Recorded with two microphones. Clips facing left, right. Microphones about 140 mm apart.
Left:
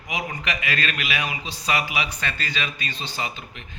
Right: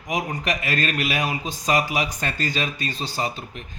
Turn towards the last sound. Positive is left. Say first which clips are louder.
# right 4 dB
turn(degrees=-40)  # may be behind; listen again after turning